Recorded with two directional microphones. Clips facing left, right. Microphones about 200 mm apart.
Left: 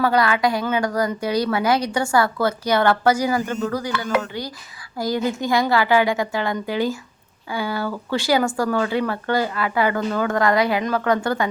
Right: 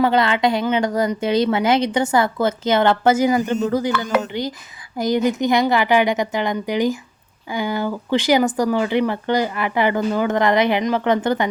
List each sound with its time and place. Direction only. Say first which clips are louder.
0.0 s speech: right 2 dB; 25° right (ahead or behind)